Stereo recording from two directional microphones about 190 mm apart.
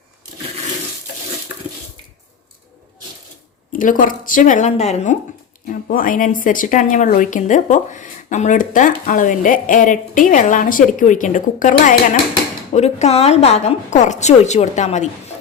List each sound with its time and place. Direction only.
3.7 s a woman's voice: 45° left (ahead or behind)